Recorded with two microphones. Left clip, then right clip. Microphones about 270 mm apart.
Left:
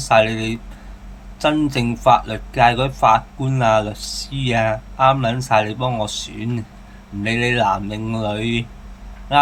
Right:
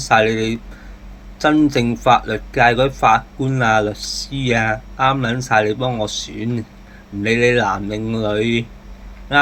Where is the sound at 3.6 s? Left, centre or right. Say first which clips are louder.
Even; centre.